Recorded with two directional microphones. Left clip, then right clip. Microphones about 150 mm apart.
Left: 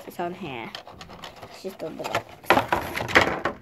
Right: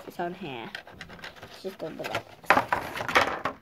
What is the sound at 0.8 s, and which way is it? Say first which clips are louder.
Sewing machine: left 2 dB; 30° right (ahead or behind).